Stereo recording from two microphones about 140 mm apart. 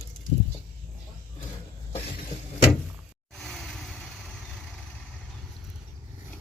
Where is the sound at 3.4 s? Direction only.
Centre (ahead or behind).